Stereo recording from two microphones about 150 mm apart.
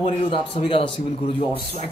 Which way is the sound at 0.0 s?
35° left (ahead or behind).